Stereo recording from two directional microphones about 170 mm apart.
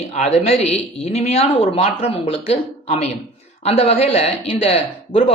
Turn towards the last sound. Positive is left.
turn(degrees=35)  # may be behind; listen again after turning